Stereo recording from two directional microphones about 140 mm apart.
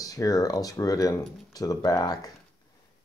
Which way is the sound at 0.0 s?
25° left (ahead or behind).